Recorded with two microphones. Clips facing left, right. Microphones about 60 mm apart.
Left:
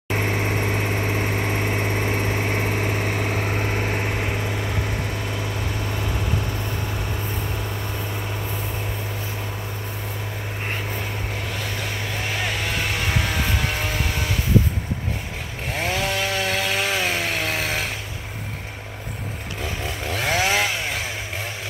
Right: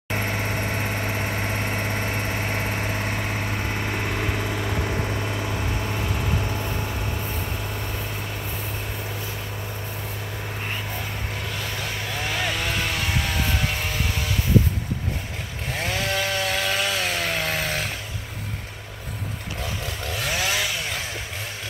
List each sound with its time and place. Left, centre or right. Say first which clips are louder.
0.3 s vehicle: left 3 dB; left; by 6.4 s centre
15.8 s chainsaw: left 2 dB; centre
16.8 s chainsaw: left 2 dB; left
17.2 s chainsaw: left 1 dB; centre
20.2 s chainsaw: left 5 dB; left